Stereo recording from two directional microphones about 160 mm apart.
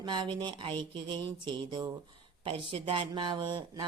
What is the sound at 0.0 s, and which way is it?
Speech, 30° right (ahead or behind).